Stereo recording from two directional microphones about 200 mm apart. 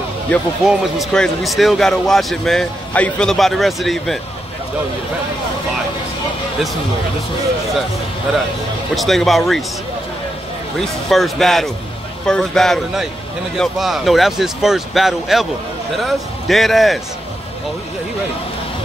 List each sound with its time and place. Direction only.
0.3 s speech: centre (ahead or behind)
8.9 s speech: centre (ahead or behind)
10.8 s speech: centre (ahead or behind)